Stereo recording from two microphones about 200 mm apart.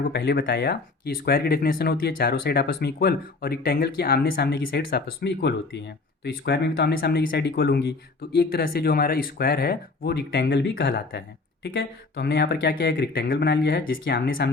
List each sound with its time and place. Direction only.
0.1 s speech: 55° left (ahead or behind)